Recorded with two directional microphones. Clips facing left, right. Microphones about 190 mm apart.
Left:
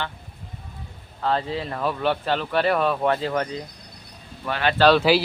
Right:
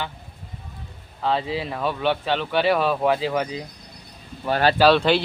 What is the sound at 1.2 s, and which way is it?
Speech, 5° right (ahead or behind).